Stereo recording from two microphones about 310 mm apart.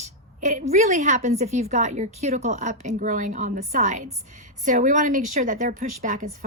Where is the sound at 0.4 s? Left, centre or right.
Right.